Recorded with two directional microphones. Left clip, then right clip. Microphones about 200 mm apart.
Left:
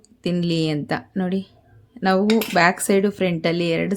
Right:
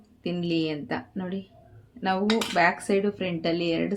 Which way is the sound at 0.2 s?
55° left (ahead or behind).